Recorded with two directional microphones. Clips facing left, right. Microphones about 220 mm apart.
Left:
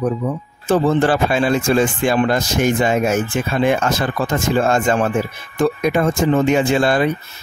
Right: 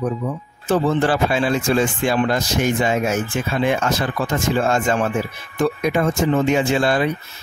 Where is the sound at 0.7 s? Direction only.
50° left (ahead or behind).